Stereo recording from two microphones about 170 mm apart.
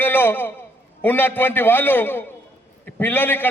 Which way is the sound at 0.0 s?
10° left (ahead or behind).